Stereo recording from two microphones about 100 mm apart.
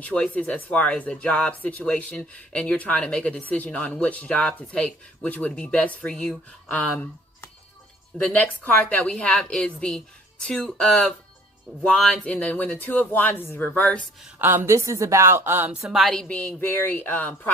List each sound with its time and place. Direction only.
0.0 s speech: 15° left (ahead or behind)
8.2 s speech: 15° left (ahead or behind)
14.4 s a woman's voice: 25° right (ahead or behind)
15.8 s speech: centre (ahead or behind); by 17.5 s 15° left (ahead or behind)